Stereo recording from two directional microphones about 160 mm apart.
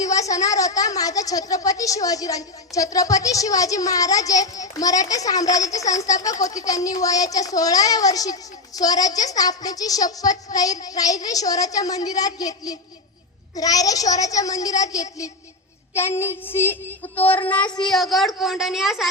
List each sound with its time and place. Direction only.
0.0 s a woman's voice: 20° left (ahead or behind)
16.0 s child singing: 15° left (ahead or behind)
17.7 s a woman's voice: centre (ahead or behind)